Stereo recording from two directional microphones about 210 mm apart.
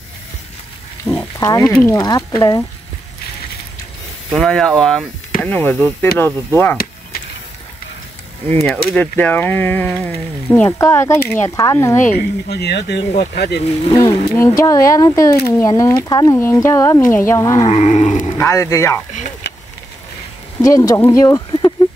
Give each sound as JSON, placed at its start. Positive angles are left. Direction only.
{"t": 1.0, "sound": "speech", "side_deg": 15}
{"t": 4.3, "sound": "speech", "side_deg": 5}
{"t": 8.5, "sound": "speech", "side_deg": 10}
{"t": 12.0, "sound": "speech", "side_deg": 50}
{"t": 14.0, "sound": "speech", "side_deg": 15}
{"t": 17.6, "sound": "a sound", "side_deg": 30}
{"t": 18.4, "sound": "speech", "side_deg": 15}
{"t": 19.4, "sound": "vehicle", "side_deg": 55}
{"t": 20.6, "sound": "speech", "side_deg": 15}